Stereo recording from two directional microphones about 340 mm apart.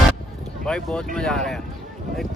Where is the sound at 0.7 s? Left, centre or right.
Centre.